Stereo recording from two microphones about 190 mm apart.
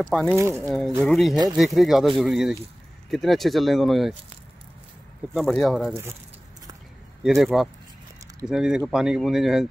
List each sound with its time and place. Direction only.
0.0 s speech: centre (ahead or behind)
0.4 s speech: 15° right (ahead or behind)
0.7 s speech: centre (ahead or behind)
1.3 s speech: 20° right (ahead or behind)
1.6 s speech: centre (ahead or behind)
5.3 s speech: centre (ahead or behind)
7.2 s speech: centre (ahead or behind)